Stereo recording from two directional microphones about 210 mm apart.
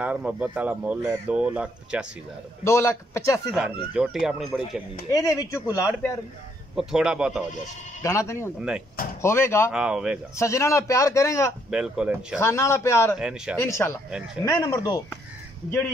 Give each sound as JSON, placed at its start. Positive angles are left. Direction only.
{"t": 0.0, "sound": "speech", "side_deg": -5}
{"t": 2.6, "sound": "a man's voice", "side_deg": 15}
{"t": 3.9, "sound": "speech", "side_deg": 0}
{"t": 5.1, "sound": "a man's voice", "side_deg": 15}
{"t": 6.7, "sound": "speech", "side_deg": 0}
{"t": 8.0, "sound": "a man's voice", "side_deg": 15}
{"t": 8.5, "sound": "speech", "side_deg": -5}
{"t": 9.2, "sound": "a man's voice", "side_deg": 10}
{"t": 9.7, "sound": "speech", "side_deg": -5}
{"t": 10.3, "sound": "a man's voice", "side_deg": 15}
{"t": 11.7, "sound": "speech", "side_deg": -5}
{"t": 12.4, "sound": "a man's voice", "side_deg": 15}
{"t": 13.1, "sound": "speech", "side_deg": -5}
{"t": 13.6, "sound": "a man's voice", "side_deg": 15}